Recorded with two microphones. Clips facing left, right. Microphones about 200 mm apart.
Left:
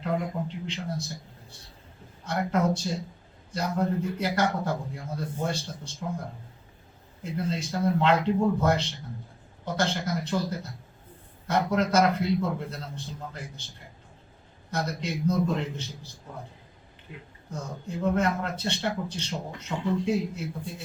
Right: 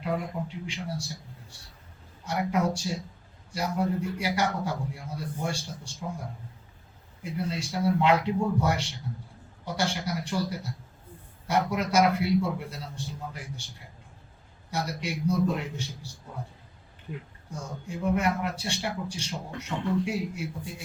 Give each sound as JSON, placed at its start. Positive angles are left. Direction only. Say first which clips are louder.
{"t": 0.0, "sound": "a man's voice", "louder": "left 2 dB", "side_deg": -10}
{"t": 2.2, "sound": "a man's voice", "louder": "left 1 dB", "side_deg": -10}
{"t": 7.2, "sound": "a man's voice", "louder": "left 2 dB", "side_deg": -10}
{"t": 14.7, "sound": "a man's voice", "louder": "left 1 dB", "side_deg": -10}
{"t": 17.5, "sound": "a man's voice", "louder": "left 2 dB", "side_deg": -10}